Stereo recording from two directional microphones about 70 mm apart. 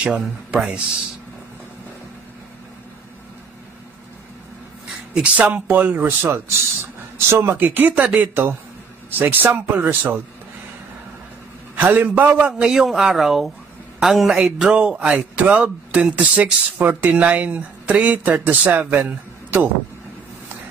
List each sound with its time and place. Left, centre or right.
0.0 s a man's voice: centre
5.1 s a man's voice: centre
6.0 s a man's voice: right
11.7 s a man's voice: right